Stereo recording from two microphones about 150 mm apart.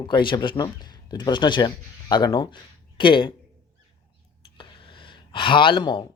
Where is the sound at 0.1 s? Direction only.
30° left (ahead or behind).